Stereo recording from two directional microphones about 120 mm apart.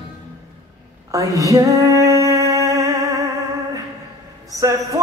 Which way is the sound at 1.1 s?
30° right (ahead or behind).